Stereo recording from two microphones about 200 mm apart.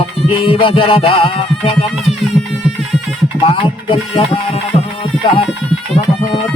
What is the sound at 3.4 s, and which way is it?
Speech, 25° left (ahead or behind).